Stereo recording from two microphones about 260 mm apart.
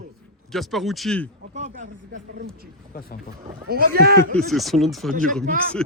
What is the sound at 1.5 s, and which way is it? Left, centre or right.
Speech, right.